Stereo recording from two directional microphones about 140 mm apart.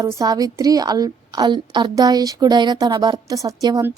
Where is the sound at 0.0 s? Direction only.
25° right (ahead or behind).